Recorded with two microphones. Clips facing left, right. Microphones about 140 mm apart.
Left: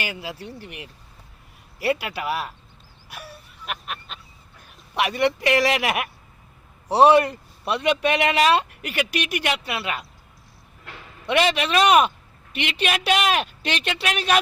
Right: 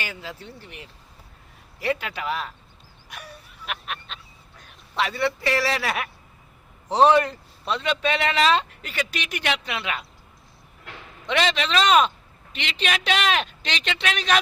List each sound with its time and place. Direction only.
0.0 s speech: 10° left (ahead or behind)
1.8 s speech: 10° left (ahead or behind)
3.1 s a sound: 5° left (ahead or behind)
4.6 s speech: 15° left (ahead or behind)
11.3 s speech: 10° left (ahead or behind)